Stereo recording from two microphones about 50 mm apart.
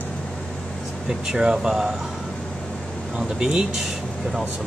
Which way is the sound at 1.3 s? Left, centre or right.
Centre.